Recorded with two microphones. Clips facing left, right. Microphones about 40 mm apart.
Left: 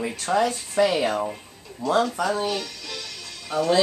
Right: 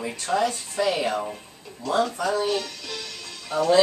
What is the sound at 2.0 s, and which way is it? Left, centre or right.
Speech, centre.